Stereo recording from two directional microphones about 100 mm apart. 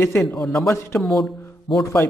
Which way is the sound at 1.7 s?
60° left (ahead or behind).